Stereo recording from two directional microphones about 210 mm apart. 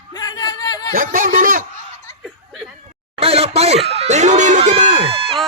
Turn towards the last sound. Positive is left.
turn(degrees=-25)  # may be behind; listen again after turning